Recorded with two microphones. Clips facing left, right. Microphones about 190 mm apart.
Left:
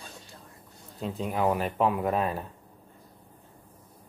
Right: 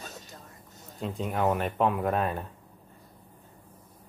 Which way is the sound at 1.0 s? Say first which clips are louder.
Even; centre (ahead or behind).